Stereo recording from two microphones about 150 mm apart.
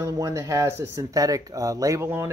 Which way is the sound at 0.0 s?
20° right (ahead or behind).